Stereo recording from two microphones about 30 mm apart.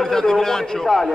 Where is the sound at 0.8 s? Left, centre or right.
Centre.